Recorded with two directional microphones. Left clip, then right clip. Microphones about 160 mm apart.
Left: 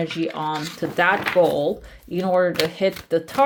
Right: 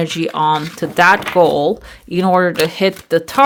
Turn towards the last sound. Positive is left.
turn(degrees=-40)  # may be behind; listen again after turning